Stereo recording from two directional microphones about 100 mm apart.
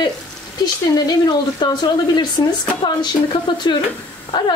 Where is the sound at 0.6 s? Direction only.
45° left (ahead or behind).